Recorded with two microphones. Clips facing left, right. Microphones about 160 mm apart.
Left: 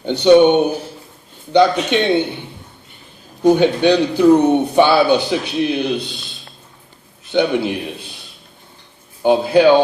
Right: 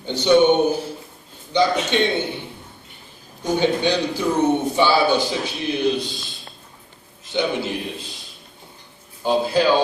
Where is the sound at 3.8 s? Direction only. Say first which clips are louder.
Left 8 dB; 60° left (ahead or behind).